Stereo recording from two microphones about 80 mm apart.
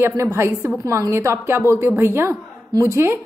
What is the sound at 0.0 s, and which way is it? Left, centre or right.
A woman's voice, right.